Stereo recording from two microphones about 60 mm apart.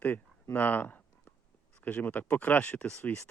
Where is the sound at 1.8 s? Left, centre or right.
Left.